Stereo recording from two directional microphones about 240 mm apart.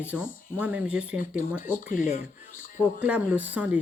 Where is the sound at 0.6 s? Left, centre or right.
Centre.